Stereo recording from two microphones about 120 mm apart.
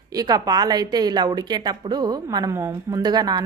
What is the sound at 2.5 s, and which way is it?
Speech, 25° right (ahead or behind).